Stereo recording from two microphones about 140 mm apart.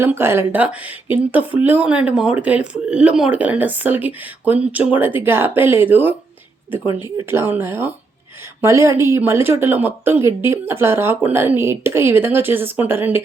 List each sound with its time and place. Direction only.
0.0 s speech: 15° right (ahead or behind)